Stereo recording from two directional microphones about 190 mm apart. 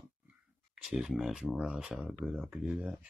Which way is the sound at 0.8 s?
Centre (ahead or behind).